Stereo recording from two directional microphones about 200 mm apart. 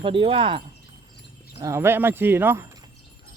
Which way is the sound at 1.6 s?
15° right (ahead or behind).